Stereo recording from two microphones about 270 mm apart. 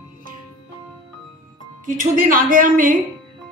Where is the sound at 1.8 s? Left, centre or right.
Right.